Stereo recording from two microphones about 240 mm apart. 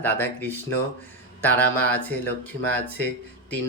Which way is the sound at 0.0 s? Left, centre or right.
Centre.